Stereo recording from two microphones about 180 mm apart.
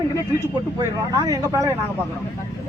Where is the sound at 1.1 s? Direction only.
20° right (ahead or behind).